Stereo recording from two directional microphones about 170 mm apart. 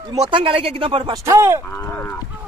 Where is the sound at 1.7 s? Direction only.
15° left (ahead or behind).